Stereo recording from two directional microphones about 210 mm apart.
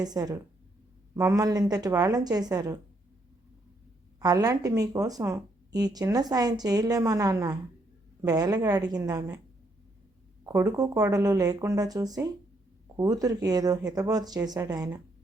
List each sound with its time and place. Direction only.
0.0 s speech: 20° right (ahead or behind)
4.2 s speech: 15° right (ahead or behind)
10.4 s speech: 15° right (ahead or behind)